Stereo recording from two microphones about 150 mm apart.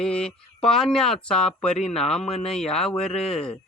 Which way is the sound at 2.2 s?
45° left (ahead or behind).